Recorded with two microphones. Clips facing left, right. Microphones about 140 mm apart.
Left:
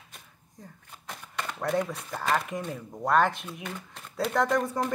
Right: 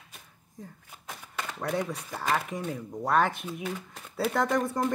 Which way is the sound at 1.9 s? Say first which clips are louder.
Left 1 dB; centre (ahead or behind).